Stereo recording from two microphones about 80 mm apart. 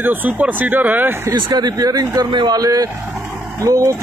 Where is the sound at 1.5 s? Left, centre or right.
Right.